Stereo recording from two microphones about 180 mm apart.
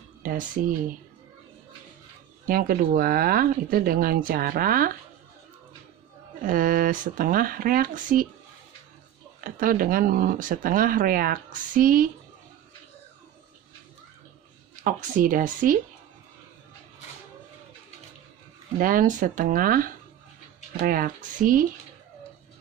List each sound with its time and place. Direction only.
0.2 s a sound: 50° right (ahead or behind)
2.5 s speech: 55° right (ahead or behind)
6.4 s speech: 50° right (ahead or behind)
9.4 s speech: 50° right (ahead or behind)
14.8 s speech: 50° right (ahead or behind)
18.8 s speech: 50° right (ahead or behind)